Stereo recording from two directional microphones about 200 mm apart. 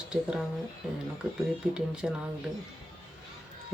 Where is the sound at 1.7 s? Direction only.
5° right (ahead or behind).